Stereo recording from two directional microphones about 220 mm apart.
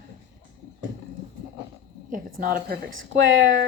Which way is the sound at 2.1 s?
40° right (ahead or behind).